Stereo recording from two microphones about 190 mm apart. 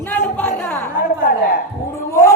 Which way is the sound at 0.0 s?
10° left (ahead or behind).